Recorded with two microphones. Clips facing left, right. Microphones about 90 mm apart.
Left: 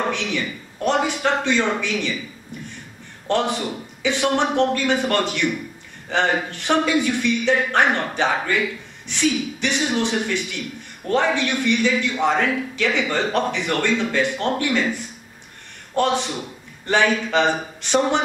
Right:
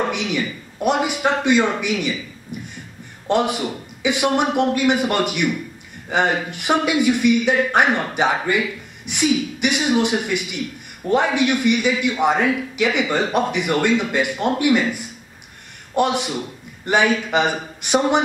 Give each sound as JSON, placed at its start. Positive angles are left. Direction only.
{"t": 0.1, "sound": "a man's voice", "side_deg": -10}
{"t": 3.3, "sound": "a man's voice", "side_deg": -15}